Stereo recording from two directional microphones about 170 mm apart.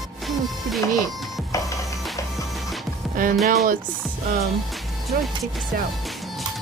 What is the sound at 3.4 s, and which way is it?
Speech, 55° right (ahead or behind).